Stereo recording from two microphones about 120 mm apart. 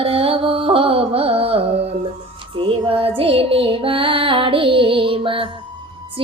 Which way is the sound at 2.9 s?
50° right (ahead or behind).